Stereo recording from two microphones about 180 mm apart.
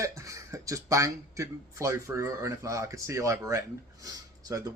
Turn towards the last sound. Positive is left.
turn(degrees=-20)  # may be behind; listen again after turning